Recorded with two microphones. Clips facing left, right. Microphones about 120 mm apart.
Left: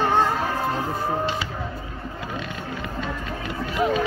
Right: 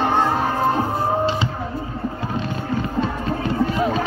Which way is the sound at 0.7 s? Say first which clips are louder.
Right 5 dB; 30° right (ahead or behind).